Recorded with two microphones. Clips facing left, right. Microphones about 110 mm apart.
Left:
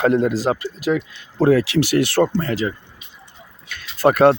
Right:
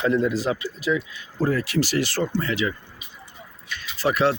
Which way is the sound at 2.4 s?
40° left (ahead or behind).